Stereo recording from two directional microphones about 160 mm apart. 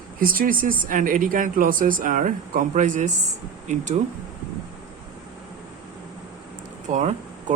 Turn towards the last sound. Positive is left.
turn(degrees=-45)  # may be behind; listen again after turning